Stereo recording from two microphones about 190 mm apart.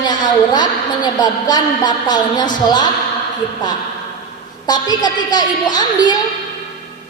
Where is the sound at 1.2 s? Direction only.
20° left (ahead or behind).